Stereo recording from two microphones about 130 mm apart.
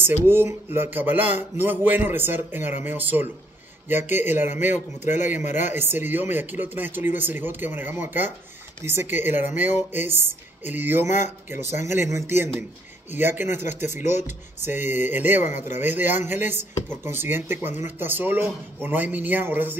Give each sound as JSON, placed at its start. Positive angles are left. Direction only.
{"t": 0.0, "sound": "speech", "side_deg": -15}
{"t": 11.1, "sound": "speech", "side_deg": 65}
{"t": 11.8, "sound": "speech", "side_deg": -20}